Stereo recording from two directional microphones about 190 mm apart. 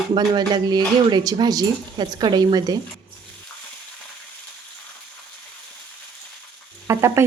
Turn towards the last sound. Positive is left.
turn(degrees=-15)  # may be behind; listen again after turning